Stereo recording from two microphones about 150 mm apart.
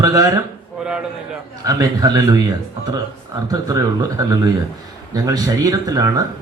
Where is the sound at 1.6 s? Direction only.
25° right (ahead or behind).